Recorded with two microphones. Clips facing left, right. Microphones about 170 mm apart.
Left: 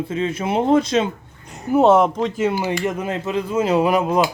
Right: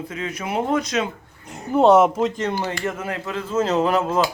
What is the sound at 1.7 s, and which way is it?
Speech, centre (ahead or behind).